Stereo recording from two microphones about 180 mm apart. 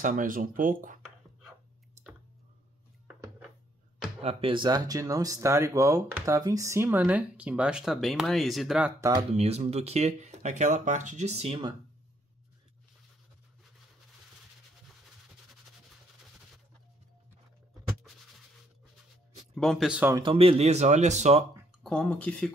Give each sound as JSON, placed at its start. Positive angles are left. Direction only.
{"t": 0.0, "sound": "speech", "side_deg": -45}
{"t": 4.2, "sound": "speech", "side_deg": -30}
{"t": 9.4, "sound": "speech", "side_deg": -35}
{"t": 19.5, "sound": "speech", "side_deg": 0}
{"t": 20.2, "sound": "speech", "side_deg": -30}
{"t": 21.8, "sound": "speech", "side_deg": 5}